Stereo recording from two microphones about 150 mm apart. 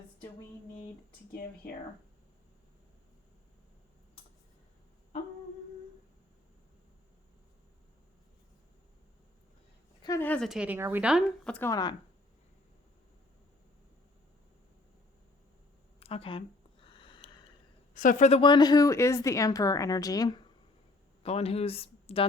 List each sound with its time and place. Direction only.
1.3 s speech: 90° left
10.2 s a woman's voice: 10° left (ahead or behind)
10.5 s a woman's voice: 5° right (ahead or behind)
11.4 s a woman's voice: 10° left (ahead or behind)
11.7 s speech: 25° left (ahead or behind)
16.0 s a sound: 40° left (ahead or behind)
17.9 s a woman's voice: 65° left (ahead or behind)
18.3 s speech: 35° left (ahead or behind)
21.2 s speech: 45° left (ahead or behind)